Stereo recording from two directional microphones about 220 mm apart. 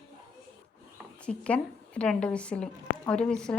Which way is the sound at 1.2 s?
5° left (ahead or behind).